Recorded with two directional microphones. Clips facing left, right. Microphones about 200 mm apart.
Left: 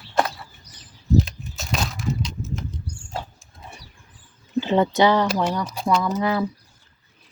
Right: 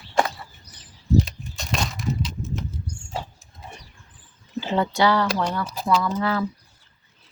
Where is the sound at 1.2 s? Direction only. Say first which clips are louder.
Left 1 dB; centre (ahead or behind).